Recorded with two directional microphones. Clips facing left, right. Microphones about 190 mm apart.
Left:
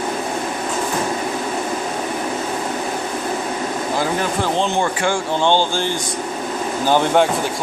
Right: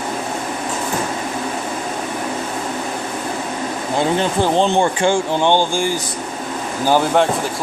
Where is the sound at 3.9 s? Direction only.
25° right (ahead or behind).